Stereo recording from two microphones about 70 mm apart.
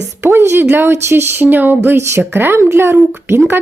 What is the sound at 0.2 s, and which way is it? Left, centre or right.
A woman's voice, right.